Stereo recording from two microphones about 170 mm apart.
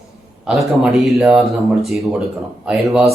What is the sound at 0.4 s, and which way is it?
Speech, 5° right (ahead or behind).